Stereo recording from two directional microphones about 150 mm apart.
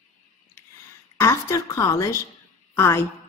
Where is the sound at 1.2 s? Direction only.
20° left (ahead or behind).